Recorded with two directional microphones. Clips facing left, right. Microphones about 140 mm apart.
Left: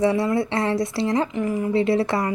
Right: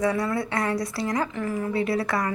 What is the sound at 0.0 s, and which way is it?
A woman's voice, 25° left (ahead or behind).